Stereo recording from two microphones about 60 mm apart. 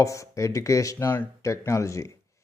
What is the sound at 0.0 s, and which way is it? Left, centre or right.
Speech, left.